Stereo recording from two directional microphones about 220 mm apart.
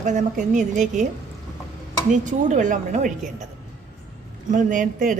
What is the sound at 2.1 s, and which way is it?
Speech, 35° right (ahead or behind).